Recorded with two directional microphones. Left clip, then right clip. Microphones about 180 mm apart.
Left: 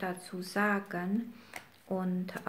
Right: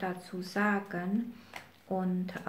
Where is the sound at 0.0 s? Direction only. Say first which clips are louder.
Right 1 dB; 30° left (ahead or behind).